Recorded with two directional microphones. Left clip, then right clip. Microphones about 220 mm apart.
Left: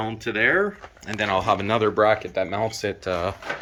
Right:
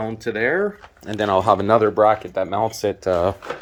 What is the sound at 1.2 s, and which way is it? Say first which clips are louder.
Speech: right 5 dB; 35° right (ahead or behind).